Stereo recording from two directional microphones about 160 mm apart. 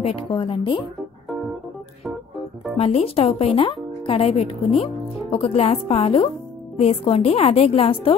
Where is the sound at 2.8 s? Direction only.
40° left (ahead or behind).